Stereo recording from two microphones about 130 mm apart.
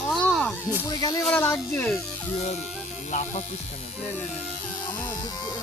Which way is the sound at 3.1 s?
60° left (ahead or behind).